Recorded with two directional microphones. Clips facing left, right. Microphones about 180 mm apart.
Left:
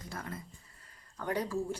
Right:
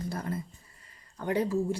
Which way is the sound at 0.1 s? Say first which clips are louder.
Right 4 dB; 35° right (ahead or behind).